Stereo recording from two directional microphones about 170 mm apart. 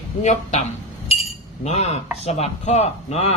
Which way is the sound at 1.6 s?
40° left (ahead or behind).